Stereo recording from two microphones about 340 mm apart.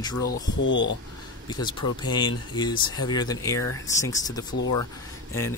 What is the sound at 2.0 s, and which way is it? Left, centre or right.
Speech, centre.